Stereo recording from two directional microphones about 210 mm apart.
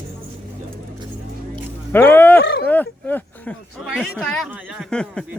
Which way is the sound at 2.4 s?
50° left (ahead or behind).